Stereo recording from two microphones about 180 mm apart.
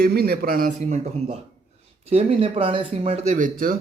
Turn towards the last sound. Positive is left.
turn(degrees=-50)  # may be behind; listen again after turning